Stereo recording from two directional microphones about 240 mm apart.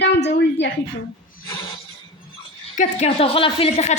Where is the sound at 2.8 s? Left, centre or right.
Left.